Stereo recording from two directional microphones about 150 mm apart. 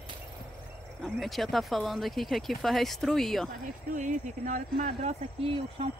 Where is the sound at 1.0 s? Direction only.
Centre (ahead or behind).